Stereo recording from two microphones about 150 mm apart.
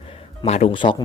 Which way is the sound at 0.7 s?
30° left (ahead or behind).